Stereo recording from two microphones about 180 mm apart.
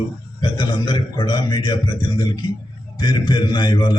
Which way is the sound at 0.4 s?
25° left (ahead or behind).